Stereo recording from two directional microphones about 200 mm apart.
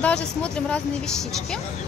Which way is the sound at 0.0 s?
5° left (ahead or behind).